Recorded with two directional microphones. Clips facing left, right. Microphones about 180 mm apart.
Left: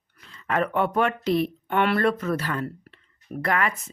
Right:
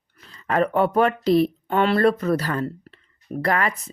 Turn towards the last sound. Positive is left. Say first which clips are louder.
# right 3 dB
turn(degrees=-35)  # may be behind; listen again after turning